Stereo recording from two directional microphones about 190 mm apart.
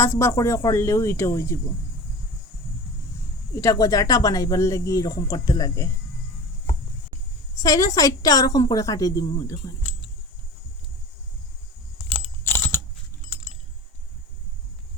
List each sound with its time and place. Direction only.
0.0 s speech: 15° left (ahead or behind)
3.5 s speech: 15° left (ahead or behind)
7.5 s a woman's voice: 15° left (ahead or behind)
12.0 s keys jangling: 10° left (ahead or behind)